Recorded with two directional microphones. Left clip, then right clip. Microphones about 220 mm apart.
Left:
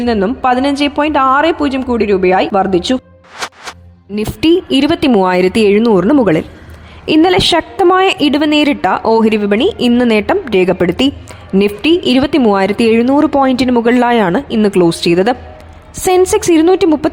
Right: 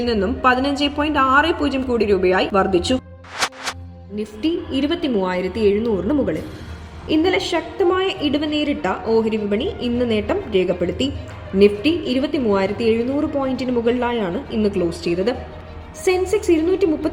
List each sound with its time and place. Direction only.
0.0 s a woman's voice: 40° left (ahead or behind)
3.3 s music: centre (ahead or behind)
4.1 s a woman's voice: 50° left (ahead or behind)